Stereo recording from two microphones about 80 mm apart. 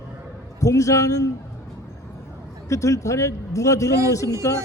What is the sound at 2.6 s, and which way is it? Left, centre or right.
A man's voice, left.